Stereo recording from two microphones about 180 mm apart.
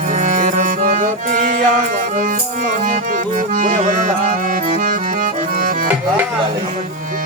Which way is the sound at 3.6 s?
45° right (ahead or behind).